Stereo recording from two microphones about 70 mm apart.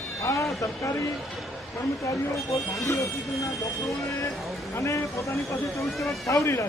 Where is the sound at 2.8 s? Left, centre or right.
Left.